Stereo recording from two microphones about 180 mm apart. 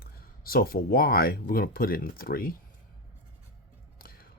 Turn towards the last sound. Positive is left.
turn(degrees=55)  # may be behind; listen again after turning